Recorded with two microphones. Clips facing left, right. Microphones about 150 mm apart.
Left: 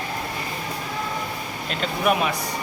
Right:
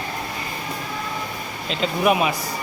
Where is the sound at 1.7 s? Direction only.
Centre (ahead or behind).